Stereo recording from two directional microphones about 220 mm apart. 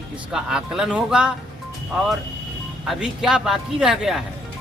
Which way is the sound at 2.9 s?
5° right (ahead or behind).